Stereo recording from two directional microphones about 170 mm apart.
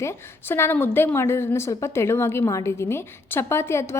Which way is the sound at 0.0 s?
15° left (ahead or behind).